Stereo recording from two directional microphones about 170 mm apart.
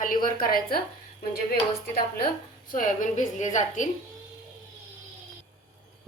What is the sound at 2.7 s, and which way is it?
A woman's voice, 50° left (ahead or behind).